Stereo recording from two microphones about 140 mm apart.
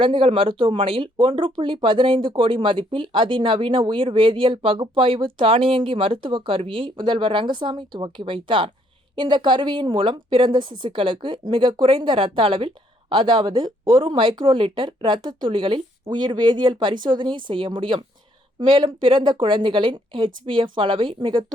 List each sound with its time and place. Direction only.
0.0 s speech: 35° right (ahead or behind)